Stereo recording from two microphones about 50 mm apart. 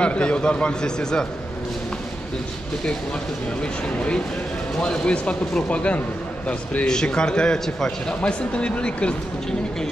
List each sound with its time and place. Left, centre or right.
0.0 s a man's voice: left
3.6 s a man's voice: left
6.9 s a man's voice: centre
8.2 s a man's voice: left